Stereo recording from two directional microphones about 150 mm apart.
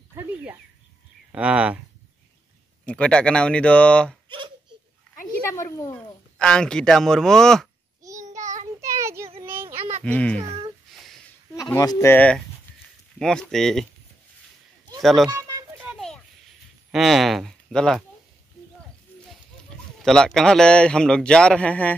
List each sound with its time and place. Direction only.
0.1 s a sound: 10° right (ahead or behind)
1.3 s speech: 5° right (ahead or behind)
2.8 s speech: 5° left (ahead or behind)
4.3 s a sound: 35° right (ahead or behind)
5.5 s a child's voice: 20° left (ahead or behind)
6.3 s a man's voice: 5° left (ahead or behind)
8.0 s child singing: 20° right (ahead or behind)
8.8 s a sound: 20° right (ahead or behind)
10.0 s speech: 10° left (ahead or behind)
11.5 s a man's voice: 25° left (ahead or behind); by 13.8 s centre (ahead or behind)
15.0 s speech: centre (ahead or behind)
15.8 s a sound: centre (ahead or behind)
16.9 s speech: centre (ahead or behind)
20.0 s a man's voice: 5° left (ahead or behind)